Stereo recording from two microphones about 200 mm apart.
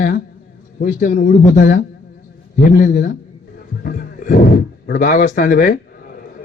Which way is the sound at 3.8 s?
45° left (ahead or behind).